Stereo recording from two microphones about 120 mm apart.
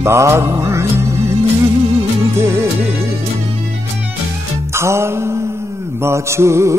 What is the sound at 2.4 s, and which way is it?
Music, 25° right (ahead or behind).